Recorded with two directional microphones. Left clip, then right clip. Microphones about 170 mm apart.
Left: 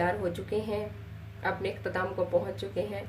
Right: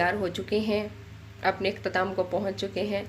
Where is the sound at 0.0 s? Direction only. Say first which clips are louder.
Right 3 dB; 55° right (ahead or behind).